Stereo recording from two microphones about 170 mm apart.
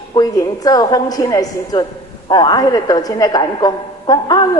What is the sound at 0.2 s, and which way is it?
A woman's voice, 20° left (ahead or behind).